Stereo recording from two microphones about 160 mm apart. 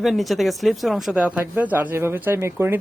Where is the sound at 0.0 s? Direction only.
Centre (ahead or behind).